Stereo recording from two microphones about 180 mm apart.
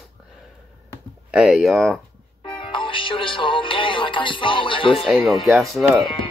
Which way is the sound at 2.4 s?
30° left (ahead or behind).